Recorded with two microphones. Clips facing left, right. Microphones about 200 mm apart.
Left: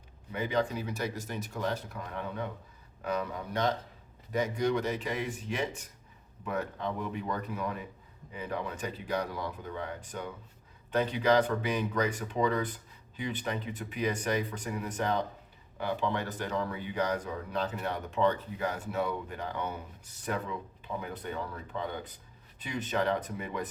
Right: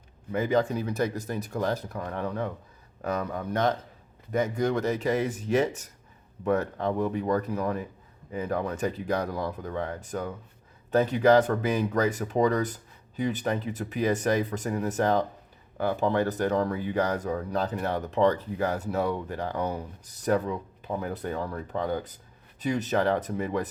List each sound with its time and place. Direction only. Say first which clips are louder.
0.3 s speech: right 6 dB; 45° right (ahead or behind)